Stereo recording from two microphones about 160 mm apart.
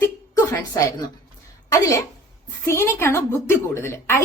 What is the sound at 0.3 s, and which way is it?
A woman's voice, 20° left (ahead or behind).